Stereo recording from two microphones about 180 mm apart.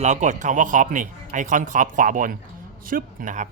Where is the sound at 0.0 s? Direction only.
40° right (ahead or behind).